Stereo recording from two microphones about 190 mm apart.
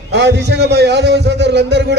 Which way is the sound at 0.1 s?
65° right (ahead or behind).